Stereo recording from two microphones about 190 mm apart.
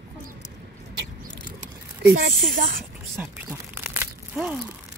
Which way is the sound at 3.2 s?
10° right (ahead or behind).